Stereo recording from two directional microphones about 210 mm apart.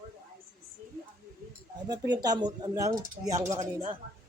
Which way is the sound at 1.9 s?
20° right (ahead or behind).